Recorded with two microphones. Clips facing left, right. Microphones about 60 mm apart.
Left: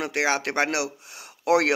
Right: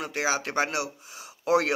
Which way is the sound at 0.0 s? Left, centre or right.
Left.